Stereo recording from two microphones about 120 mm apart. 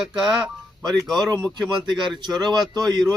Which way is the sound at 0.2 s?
5° right (ahead or behind).